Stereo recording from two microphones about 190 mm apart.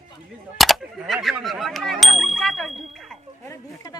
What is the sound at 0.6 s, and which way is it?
Speech, centre (ahead or behind).